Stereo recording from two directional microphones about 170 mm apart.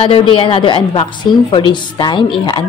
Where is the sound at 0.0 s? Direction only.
30° left (ahead or behind).